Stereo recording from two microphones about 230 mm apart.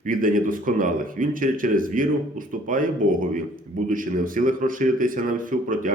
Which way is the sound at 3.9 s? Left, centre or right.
Right.